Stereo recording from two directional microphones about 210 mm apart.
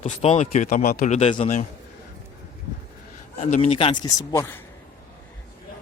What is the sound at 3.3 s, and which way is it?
A man's voice, 30° left (ahead or behind).